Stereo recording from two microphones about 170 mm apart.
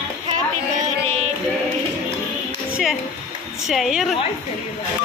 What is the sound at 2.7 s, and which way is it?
Music, centre (ahead or behind).